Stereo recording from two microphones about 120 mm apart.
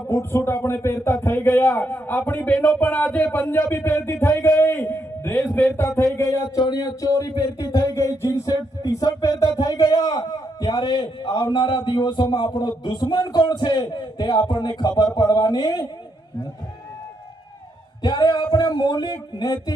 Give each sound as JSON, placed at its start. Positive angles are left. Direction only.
{"t": 0.1, "sound": "speech", "side_deg": 25}
{"t": 6.1, "sound": "a sound", "side_deg": 30}
{"t": 9.6, "sound": "a man's voice", "side_deg": 30}
{"t": 11.5, "sound": "music", "side_deg": 40}
{"t": 18.0, "sound": "music", "side_deg": 35}